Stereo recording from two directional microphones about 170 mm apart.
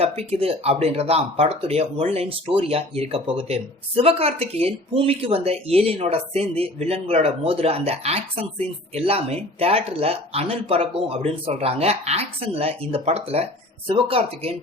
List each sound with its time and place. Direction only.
0.0 s speech: 35° right (ahead or behind)